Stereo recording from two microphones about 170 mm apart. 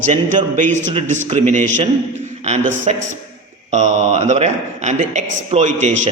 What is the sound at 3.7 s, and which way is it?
A man's voice, 45° right (ahead or behind).